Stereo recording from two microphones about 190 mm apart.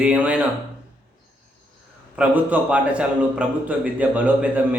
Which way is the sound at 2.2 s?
5° right (ahead or behind).